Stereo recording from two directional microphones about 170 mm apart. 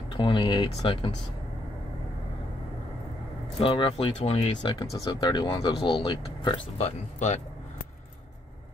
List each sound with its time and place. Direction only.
0.2 s speech: 30° left (ahead or behind)
3.5 s speech: 30° left (ahead or behind)
4.6 s speech: 25° left (ahead or behind)